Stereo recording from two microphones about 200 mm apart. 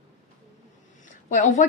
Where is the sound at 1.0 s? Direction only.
40° left (ahead or behind).